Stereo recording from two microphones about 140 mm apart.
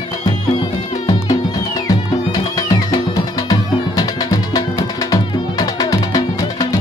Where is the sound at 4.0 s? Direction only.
25° left (ahead or behind).